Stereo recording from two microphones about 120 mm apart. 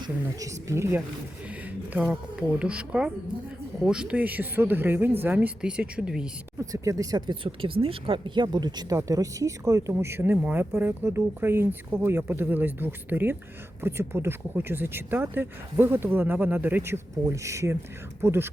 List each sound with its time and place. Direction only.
0.0 s speech: 30° right (ahead or behind)
1.5 s a sound: 10° right (ahead or behind)
2.0 s speech: 10° right (ahead or behind)
6.6 s speech: 30° right (ahead or behind)